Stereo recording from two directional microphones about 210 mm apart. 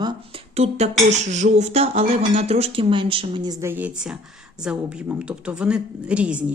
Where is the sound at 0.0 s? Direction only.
25° right (ahead or behind).